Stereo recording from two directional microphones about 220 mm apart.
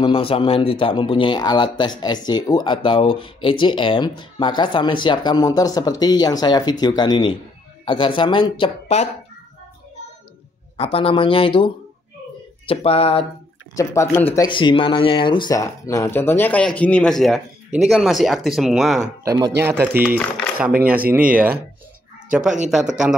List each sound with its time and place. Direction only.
0.0 s speech: 25° left (ahead or behind)
10.8 s speech: 25° left (ahead or behind)
13.7 s speech: 10° left (ahead or behind)
19.2 s speech: 15° right (ahead or behind)
20.2 s coin: 5° left (ahead or behind)
21.1 s speech: 5° right (ahead or behind)
23.0 s speech: 5° right (ahead or behind)